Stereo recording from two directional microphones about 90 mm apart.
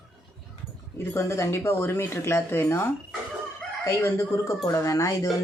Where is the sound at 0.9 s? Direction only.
30° left (ahead or behind).